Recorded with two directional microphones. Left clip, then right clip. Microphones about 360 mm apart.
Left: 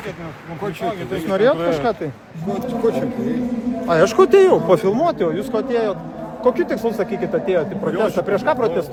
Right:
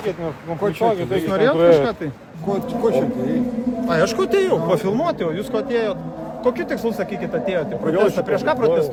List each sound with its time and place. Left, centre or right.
0.6 s speech: right
1.3 s speech: centre
2.8 s speech: centre
3.8 s a man's voice: centre